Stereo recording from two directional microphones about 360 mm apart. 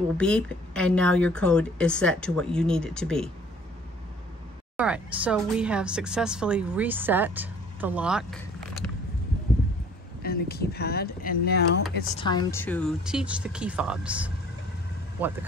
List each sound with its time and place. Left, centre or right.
0.2 s speech: centre
4.7 s speech: centre
10.2 s speech: left
12.2 s speech: centre